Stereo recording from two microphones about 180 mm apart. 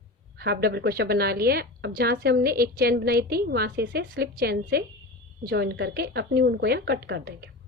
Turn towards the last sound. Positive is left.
turn(degrees=-65)  # may be behind; listen again after turning